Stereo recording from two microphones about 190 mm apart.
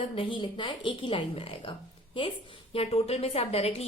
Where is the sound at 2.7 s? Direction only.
30° left (ahead or behind).